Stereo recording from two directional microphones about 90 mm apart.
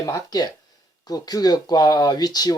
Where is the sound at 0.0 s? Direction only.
40° left (ahead or behind).